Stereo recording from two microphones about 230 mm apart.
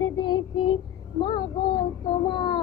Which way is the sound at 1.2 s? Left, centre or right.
Centre.